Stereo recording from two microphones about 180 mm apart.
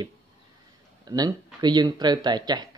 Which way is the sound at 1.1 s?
20° right (ahead or behind).